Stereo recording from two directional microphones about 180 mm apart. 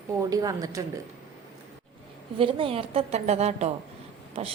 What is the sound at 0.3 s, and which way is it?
Speech, 20° right (ahead or behind).